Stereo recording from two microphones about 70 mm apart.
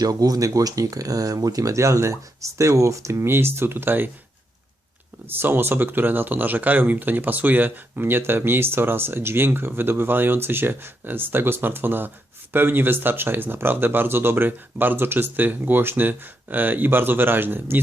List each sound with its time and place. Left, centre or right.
0.0 s speech: right
5.4 s speech: right